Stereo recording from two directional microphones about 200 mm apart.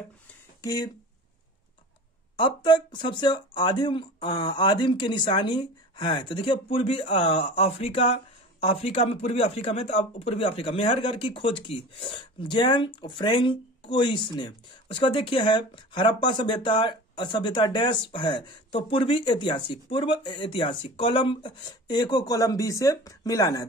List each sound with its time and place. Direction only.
0.6 s speech: 15° left (ahead or behind)
2.3 s speech: 25° left (ahead or behind)